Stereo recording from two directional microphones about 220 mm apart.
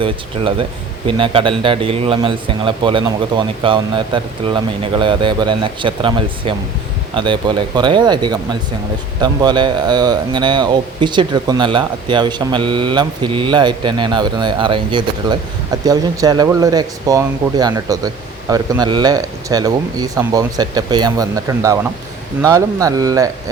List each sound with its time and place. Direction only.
1.0 s speech: 25° right (ahead or behind)